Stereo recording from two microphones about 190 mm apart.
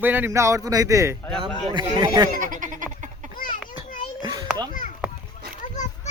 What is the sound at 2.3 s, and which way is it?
Goat, 45° right (ahead or behind).